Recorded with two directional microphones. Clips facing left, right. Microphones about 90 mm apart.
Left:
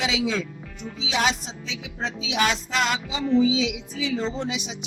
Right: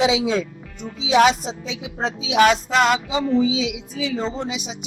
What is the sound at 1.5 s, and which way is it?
Music, 40° right (ahead or behind).